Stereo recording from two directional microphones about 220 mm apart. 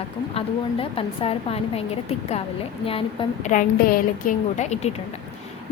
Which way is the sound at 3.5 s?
35° left (ahead or behind).